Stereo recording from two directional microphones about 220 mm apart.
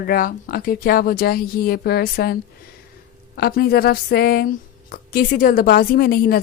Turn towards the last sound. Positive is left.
turn(degrees=40)  # may be behind; listen again after turning